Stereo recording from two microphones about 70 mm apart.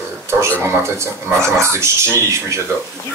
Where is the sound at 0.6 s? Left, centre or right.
Right.